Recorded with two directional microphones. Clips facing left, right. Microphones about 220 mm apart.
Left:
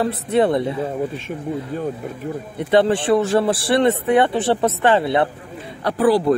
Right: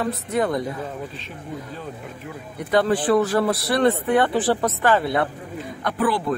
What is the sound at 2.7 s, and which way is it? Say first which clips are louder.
Speech: left 3 dB; 25° left (ahead or behind).